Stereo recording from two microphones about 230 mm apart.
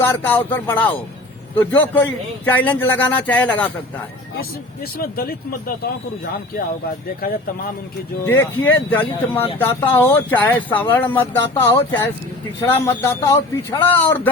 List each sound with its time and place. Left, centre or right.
0.0 s speech: centre
4.9 s speech: left
8.3 s speech: centre